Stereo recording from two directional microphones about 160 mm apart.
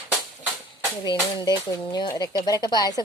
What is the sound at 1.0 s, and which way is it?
Speech, 25° left (ahead or behind).